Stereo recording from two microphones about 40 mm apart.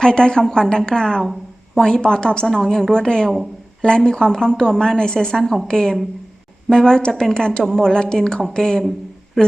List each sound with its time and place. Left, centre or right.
0.0 s speech: centre
5.4 s a woman's voice: centre
5.6 s speech: centre